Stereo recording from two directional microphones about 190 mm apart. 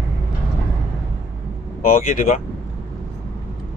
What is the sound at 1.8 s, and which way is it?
Speech, 50° left (ahead or behind).